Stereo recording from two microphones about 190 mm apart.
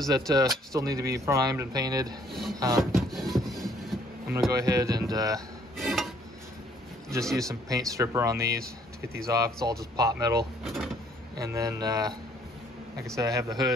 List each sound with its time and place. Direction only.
0.3 s speech: 20° right (ahead or behind)
2.8 s music: centre (ahead or behind)
4.3 s speech: 15° right (ahead or behind)
5.8 s dishes: centre (ahead or behind)
7.4 s speech: 20° right (ahead or behind)
10.6 s speech: centre (ahead or behind)
11.3 s speech: 20° right (ahead or behind)
13.1 s speech: 15° right (ahead or behind)